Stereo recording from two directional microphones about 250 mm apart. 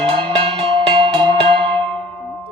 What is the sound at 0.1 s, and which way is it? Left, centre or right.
Cowbell, right.